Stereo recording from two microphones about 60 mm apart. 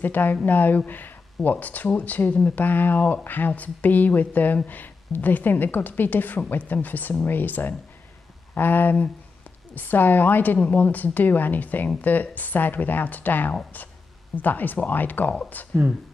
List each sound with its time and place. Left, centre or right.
0.0 s a woman's voice: left